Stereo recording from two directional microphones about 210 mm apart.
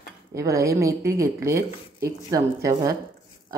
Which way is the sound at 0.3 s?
15° right (ahead or behind).